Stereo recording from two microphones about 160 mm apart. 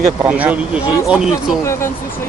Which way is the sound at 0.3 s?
10° right (ahead or behind).